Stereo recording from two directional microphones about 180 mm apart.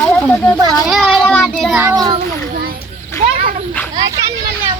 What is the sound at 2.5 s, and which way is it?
Children playing, 55° right (ahead or behind).